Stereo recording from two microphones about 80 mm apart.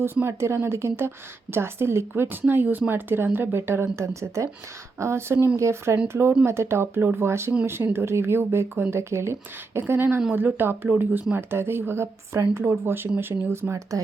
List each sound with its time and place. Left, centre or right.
0.0 s a woman's voice: right